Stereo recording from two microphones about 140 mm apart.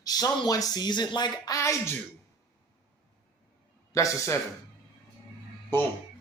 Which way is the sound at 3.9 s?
20° left (ahead or behind).